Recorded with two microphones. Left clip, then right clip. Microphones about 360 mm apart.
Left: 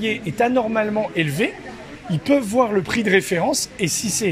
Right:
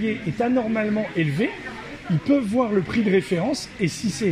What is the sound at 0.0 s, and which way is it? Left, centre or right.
Speech, left.